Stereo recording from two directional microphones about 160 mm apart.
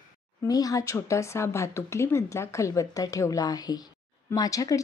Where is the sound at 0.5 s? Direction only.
20° left (ahead or behind).